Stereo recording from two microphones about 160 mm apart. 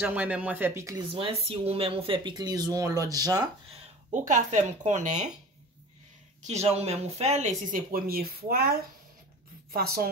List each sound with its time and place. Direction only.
0.0 s speech: 10° right (ahead or behind)
1.1 s speech: 35° right (ahead or behind)
4.1 s speech: 50° right (ahead or behind)
6.4 s a woman's voice: 45° right (ahead or behind); by 10.0 s 75° right (ahead or behind)